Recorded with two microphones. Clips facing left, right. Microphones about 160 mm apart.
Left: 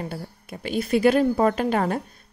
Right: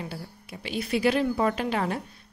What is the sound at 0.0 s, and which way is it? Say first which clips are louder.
A woman's voice: left 4 dB; 45° left (ahead or behind).